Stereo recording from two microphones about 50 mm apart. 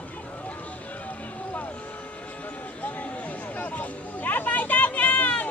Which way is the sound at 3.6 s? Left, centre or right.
Left.